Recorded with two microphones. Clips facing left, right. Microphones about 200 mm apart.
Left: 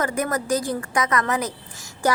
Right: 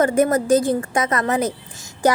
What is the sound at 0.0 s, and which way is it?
A woman's voice, 25° right (ahead or behind).